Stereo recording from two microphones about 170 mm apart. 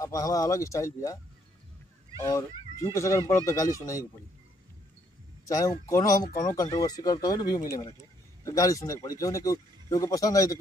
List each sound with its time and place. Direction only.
0.0 s speech: 20° left (ahead or behind)
2.2 s speech: 20° left (ahead or behind)
5.5 s speech: 20° left (ahead or behind)